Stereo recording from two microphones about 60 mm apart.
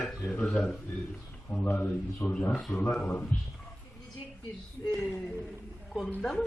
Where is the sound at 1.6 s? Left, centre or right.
Left.